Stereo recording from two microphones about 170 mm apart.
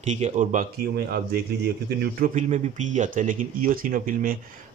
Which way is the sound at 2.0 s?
50° right (ahead or behind).